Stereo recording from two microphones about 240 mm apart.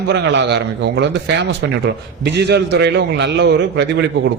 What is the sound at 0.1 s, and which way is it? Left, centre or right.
A man's voice, right.